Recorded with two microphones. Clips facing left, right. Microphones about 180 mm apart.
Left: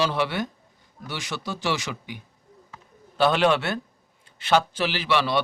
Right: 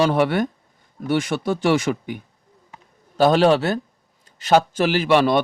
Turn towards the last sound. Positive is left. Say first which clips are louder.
# right 8 dB
turn(degrees=-50)  # may be behind; listen again after turning